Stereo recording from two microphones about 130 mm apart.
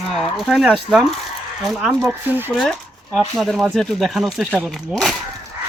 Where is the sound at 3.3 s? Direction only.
Centre (ahead or behind).